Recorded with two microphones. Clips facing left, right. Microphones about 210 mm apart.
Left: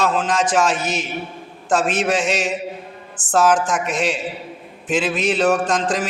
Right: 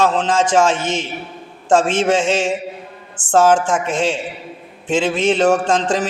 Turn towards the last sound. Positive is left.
turn(degrees=-25)  # may be behind; listen again after turning